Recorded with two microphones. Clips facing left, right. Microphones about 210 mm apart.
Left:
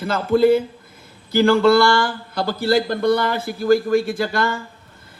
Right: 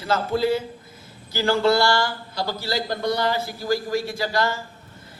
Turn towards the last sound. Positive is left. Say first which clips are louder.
# left 3 dB
turn(degrees=55)  # may be behind; listen again after turning